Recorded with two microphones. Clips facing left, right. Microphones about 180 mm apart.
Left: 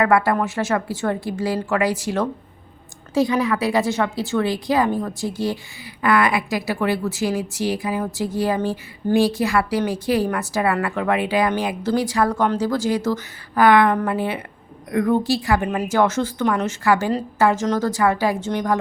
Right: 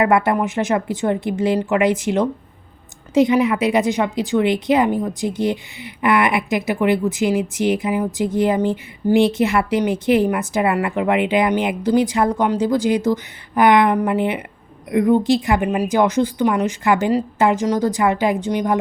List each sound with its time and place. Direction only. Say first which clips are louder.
0.0 s a woman's voice: right 1 dB; 20° right (ahead or behind)